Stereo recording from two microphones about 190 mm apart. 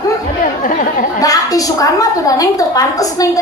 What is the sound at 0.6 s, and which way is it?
Speech, 45° left (ahead or behind).